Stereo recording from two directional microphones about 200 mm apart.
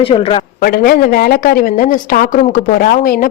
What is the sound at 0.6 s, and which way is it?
A woman's voice, 50° left (ahead or behind).